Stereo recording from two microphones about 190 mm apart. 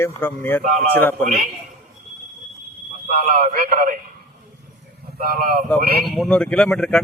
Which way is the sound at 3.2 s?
45° right (ahead or behind).